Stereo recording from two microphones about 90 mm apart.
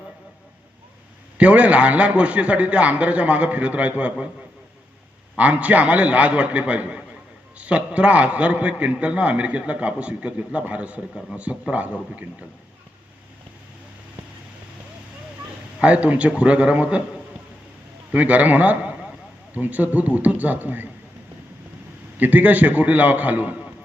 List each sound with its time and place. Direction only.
1.4 s a man's voice: 15° right (ahead or behind)
5.4 s a man's voice: 15° right (ahead or behind)
15.8 s a man's voice: 15° right (ahead or behind)
18.1 s a man's voice: 15° right (ahead or behind)
22.2 s a man's voice: 20° right (ahead or behind)